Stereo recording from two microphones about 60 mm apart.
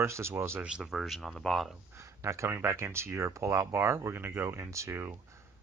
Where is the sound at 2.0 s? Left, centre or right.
Right.